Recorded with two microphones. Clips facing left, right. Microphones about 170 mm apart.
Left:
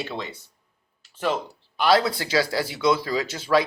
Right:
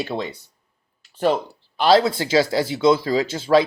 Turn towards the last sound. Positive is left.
turn(degrees=-25)  # may be behind; listen again after turning